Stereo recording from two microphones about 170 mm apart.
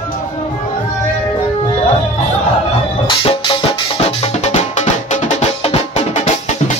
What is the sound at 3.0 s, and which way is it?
Music, 30° left (ahead or behind).